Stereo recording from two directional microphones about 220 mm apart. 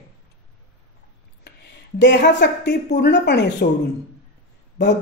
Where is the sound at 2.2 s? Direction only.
50° left (ahead or behind).